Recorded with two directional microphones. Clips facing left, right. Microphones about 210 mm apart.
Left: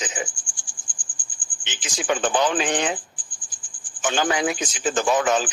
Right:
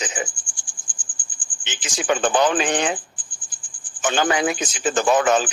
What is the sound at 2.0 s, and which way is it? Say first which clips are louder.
Speech: right 3 dB; 55° right (ahead or behind).